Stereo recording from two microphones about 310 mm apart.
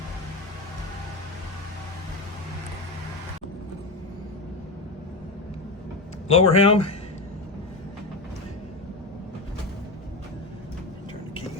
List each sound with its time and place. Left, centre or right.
6.2 s speech: centre